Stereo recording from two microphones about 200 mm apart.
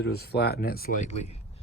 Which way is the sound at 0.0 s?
55° left (ahead or behind).